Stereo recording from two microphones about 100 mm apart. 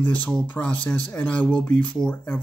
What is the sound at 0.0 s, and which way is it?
Speech, 15° left (ahead or behind).